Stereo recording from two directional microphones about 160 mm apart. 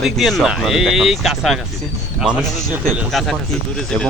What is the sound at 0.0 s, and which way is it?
Speech, centre (ahead or behind).